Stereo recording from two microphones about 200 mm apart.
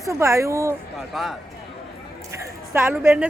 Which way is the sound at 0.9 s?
Centre (ahead or behind).